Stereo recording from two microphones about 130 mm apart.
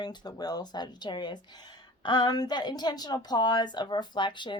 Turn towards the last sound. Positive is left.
turn(degrees=35)  # may be behind; listen again after turning